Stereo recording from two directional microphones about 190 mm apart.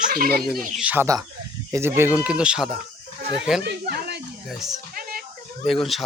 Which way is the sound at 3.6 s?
60° right (ahead or behind).